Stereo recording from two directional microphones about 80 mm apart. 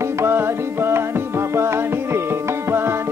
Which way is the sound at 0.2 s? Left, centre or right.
Right.